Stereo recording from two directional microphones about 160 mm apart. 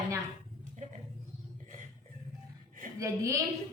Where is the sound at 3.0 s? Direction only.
20° right (ahead or behind).